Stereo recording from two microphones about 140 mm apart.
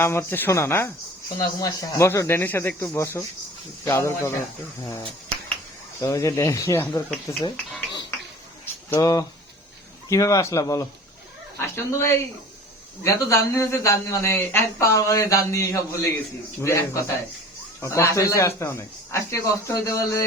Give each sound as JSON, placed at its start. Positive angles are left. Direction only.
{"t": 0.0, "sound": "a man's voice", "side_deg": 15}
{"t": 6.0, "sound": "a man's voice", "side_deg": 20}
{"t": 8.6, "sound": "a sound", "side_deg": 20}
{"t": 10.1, "sound": "a man's voice", "side_deg": 25}